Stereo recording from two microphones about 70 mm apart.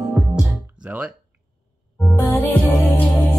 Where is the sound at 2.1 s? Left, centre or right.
Left.